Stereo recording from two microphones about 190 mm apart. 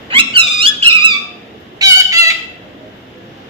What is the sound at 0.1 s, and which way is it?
Squeak, 30° right (ahead or behind).